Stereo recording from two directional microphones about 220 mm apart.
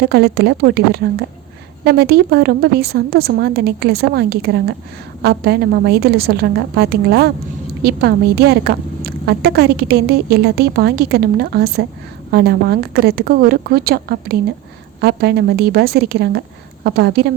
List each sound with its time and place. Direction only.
0.0 s a woman's voice: 45° right (ahead or behind)